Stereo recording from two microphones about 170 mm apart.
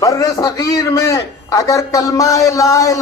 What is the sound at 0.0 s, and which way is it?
A man's voice, 20° left (ahead or behind).